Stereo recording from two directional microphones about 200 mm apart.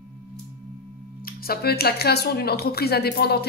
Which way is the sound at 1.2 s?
50° left (ahead or behind).